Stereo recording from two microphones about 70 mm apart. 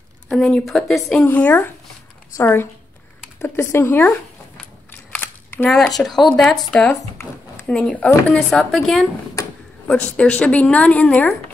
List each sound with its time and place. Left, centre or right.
0.3 s a woman's voice: centre
1.2 s a woman's voice: left
5.7 s speech: centre
9.8 s a woman's voice: centre